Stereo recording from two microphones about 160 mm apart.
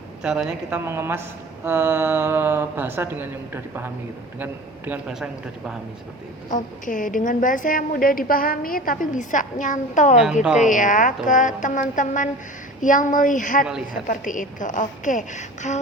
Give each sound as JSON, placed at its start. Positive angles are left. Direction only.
{"t": 0.2, "sound": "a man's voice", "side_deg": -5}
{"t": 6.5, "sound": "a woman's voice", "side_deg": 55}